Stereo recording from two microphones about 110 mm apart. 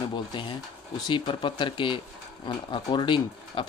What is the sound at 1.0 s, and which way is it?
Speech, 50° left (ahead or behind).